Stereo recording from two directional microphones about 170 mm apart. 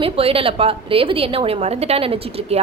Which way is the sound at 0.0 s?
35° right (ahead or behind).